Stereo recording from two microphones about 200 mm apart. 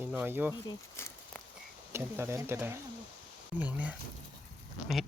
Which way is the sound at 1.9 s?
10° right (ahead or behind).